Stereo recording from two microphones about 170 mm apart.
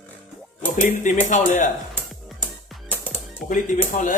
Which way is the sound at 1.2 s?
50° left (ahead or behind).